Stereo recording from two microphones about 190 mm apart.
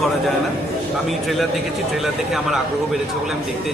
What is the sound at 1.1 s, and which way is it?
Speech, centre (ahead or behind).